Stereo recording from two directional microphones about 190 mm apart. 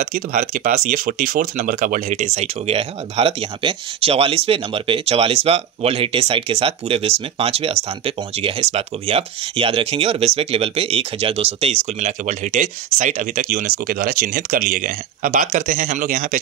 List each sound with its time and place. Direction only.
0.0 s speech: 50° right (ahead or behind)